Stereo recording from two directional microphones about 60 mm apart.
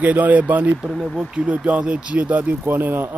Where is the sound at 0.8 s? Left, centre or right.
Centre.